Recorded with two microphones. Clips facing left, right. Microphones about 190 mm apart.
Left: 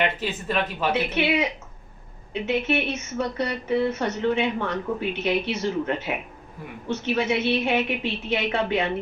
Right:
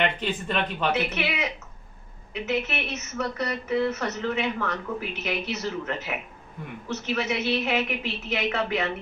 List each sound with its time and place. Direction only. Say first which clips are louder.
0.0 s speech: left 1 dB; 5° left (ahead or behind)
1.1 s speech: left 6 dB; 30° left (ahead or behind)